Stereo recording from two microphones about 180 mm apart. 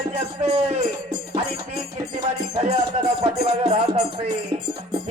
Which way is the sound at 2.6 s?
35° right (ahead or behind).